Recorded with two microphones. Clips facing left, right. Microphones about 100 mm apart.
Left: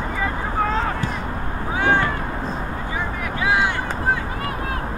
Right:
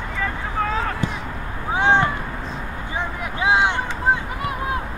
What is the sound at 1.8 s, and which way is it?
Cat, 20° right (ahead or behind).